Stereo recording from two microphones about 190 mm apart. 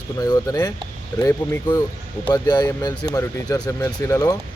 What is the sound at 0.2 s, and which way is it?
Speech, 20° left (ahead or behind).